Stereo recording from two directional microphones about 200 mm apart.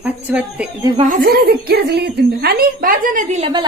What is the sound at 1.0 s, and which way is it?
Speech, 40° right (ahead or behind).